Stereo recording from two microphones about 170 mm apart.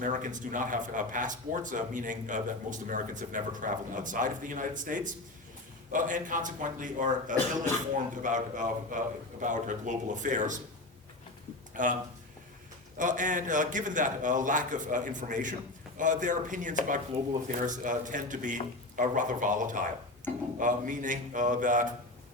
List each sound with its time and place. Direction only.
0.0 s speech: 50° right (ahead or behind)
11.8 s speech: 50° right (ahead or behind)
13.0 s speech: 50° right (ahead or behind)